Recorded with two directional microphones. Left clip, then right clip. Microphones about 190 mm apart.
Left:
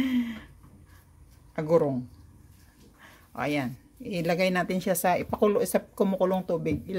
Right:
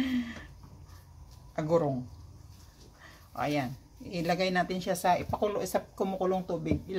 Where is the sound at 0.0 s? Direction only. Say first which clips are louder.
Left 4 dB; 45° left (ahead or behind).